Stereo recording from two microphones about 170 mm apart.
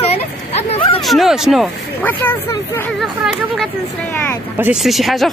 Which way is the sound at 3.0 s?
Centre (ahead or behind).